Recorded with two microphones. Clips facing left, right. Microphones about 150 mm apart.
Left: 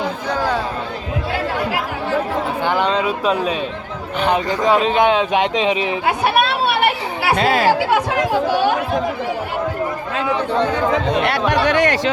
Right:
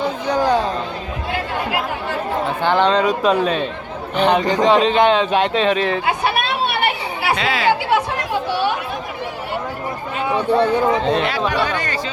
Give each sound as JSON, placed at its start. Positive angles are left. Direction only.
{"t": 0.3, "sound": "chatter", "side_deg": -15}
{"t": 2.6, "sound": "speech", "side_deg": 10}
{"t": 7.3, "sound": "speech", "side_deg": 50}
{"t": 10.3, "sound": "speech", "side_deg": -10}
{"t": 11.2, "sound": "speech", "side_deg": 65}